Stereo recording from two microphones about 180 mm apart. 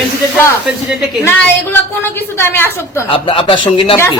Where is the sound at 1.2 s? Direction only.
10° left (ahead or behind).